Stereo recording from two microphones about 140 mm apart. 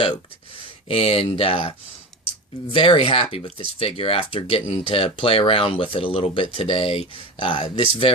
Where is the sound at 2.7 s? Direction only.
40° left (ahead or behind).